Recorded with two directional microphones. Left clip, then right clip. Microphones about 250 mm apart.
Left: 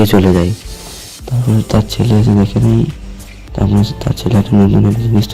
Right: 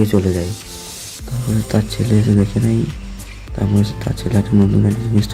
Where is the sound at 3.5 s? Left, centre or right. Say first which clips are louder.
Left 4 dB; centre.